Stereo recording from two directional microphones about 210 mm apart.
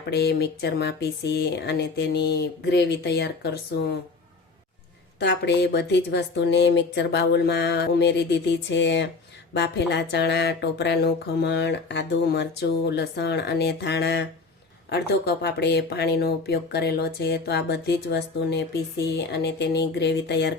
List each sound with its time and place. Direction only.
0.1 s speech: 50° left (ahead or behind)
5.2 s speech: 50° left (ahead or behind)